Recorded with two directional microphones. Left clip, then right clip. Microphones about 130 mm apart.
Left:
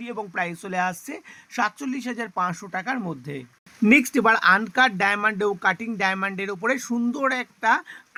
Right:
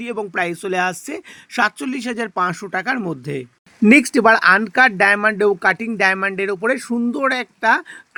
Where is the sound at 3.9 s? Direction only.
20° right (ahead or behind).